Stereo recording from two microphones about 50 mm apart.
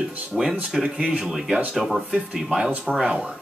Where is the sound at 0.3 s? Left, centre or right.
Centre.